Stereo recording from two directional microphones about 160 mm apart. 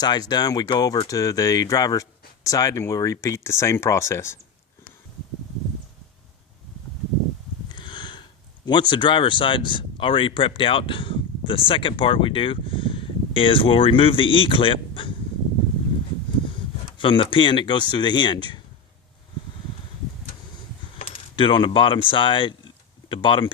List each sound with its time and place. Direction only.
0.0 s speech: 25° left (ahead or behind)
7.7 s speech: 30° left (ahead or behind)
17.0 s speech: 35° left (ahead or behind)
21.0 s coin: 30° left (ahead or behind)
22.1 s speech: 30° left (ahead or behind)